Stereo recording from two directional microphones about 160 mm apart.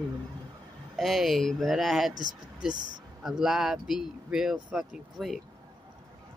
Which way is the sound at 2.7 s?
25° right (ahead or behind).